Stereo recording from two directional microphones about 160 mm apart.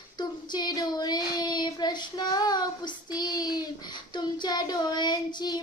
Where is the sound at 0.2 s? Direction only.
25° left (ahead or behind).